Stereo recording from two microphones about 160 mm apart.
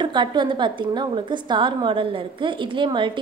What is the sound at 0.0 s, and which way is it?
A woman's voice, 30° right (ahead or behind).